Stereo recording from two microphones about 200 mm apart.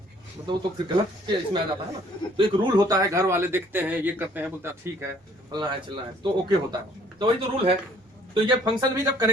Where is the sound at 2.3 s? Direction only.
20° right (ahead or behind).